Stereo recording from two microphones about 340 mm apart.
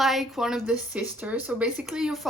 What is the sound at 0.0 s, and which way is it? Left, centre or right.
A woman's voice, centre.